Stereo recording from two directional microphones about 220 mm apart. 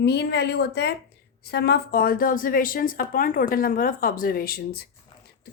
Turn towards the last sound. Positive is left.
turn(degrees=45)  # may be behind; listen again after turning